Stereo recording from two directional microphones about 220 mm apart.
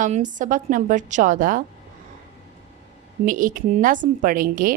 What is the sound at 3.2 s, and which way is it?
A woman's voice, 35° right (ahead or behind).